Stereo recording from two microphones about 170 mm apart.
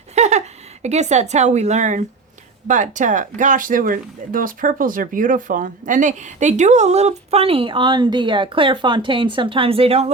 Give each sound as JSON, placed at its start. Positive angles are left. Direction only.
{"t": 0.1, "sound": "speech", "side_deg": -40}